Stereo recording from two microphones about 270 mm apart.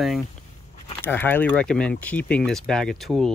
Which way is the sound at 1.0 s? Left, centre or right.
Centre.